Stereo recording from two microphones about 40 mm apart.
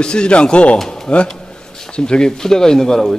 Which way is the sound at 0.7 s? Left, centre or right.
Centre.